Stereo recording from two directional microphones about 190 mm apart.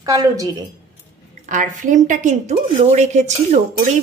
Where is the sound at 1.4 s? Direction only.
40° right (ahead or behind).